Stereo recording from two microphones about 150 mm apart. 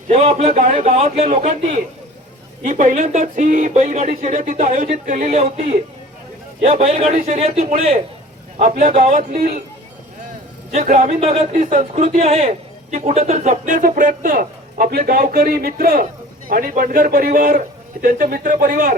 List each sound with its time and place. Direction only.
0.1 s speech: 45° right (ahead or behind)
0.9 s speech: 40° right (ahead or behind)
10.7 s speech: 50° right (ahead or behind)
12.1 s a man's voice: 40° right (ahead or behind); by 18.9 s 65° right (ahead or behind)